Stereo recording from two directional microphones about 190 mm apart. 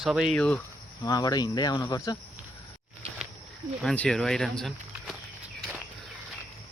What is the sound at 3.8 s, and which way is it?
Speech, 5° left (ahead or behind).